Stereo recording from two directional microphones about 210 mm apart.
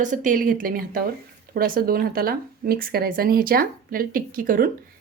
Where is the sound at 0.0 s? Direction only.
40° right (ahead or behind).